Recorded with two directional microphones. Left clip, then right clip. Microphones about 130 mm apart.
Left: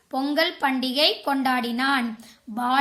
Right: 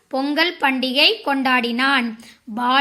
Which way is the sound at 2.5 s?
25° right (ahead or behind).